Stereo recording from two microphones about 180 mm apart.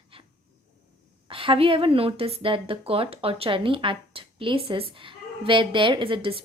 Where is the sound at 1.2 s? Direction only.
30° right (ahead or behind).